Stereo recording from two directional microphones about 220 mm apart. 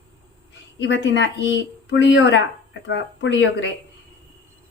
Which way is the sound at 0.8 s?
55° left (ahead or behind).